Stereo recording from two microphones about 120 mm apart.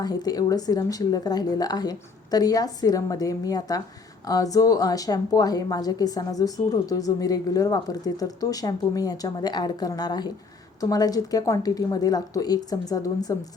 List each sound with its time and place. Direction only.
0.0 s a woman's voice: 35° left (ahead or behind)